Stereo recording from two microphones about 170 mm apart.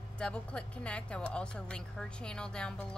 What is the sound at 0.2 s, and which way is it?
Speech, 5° left (ahead or behind).